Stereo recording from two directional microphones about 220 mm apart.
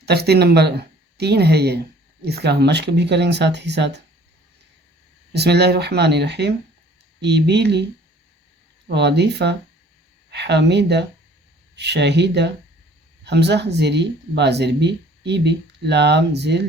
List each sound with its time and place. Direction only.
0.0 s speech: 45° right (ahead or behind)
5.3 s speech: 50° right (ahead or behind)
8.9 s speech: 50° right (ahead or behind)